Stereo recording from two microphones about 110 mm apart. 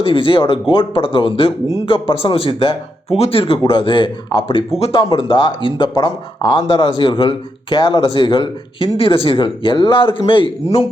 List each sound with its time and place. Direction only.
0.0 s speech: 50° left (ahead or behind)
6.7 s speech: 55° left (ahead or behind)